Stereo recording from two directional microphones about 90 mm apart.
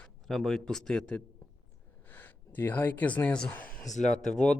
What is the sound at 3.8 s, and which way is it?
Speech, 5° left (ahead or behind).